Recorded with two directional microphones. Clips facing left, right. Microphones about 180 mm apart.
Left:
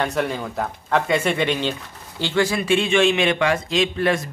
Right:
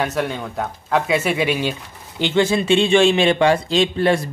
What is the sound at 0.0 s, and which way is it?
Speech, centre (ahead or behind).